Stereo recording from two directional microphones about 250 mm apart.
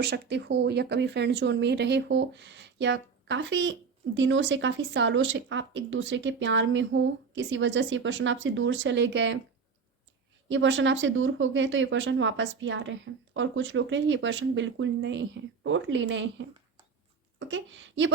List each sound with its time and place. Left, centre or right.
0.0 s speech: right
10.5 s speech: right